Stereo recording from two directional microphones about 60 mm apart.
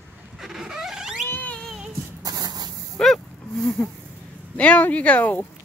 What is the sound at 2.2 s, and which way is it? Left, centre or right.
Spray, right.